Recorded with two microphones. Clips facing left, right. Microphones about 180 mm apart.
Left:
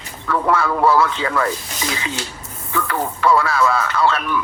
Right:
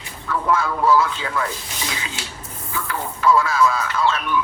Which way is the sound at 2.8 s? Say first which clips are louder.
Left 1 dB; 65° left (ahead or behind).